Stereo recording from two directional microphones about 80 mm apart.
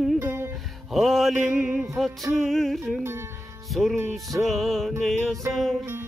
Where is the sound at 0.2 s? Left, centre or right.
Right.